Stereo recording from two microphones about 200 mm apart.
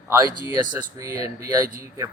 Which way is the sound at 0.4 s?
15° right (ahead or behind).